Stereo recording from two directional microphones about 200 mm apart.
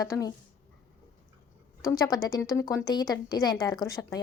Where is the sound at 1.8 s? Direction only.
15° left (ahead or behind).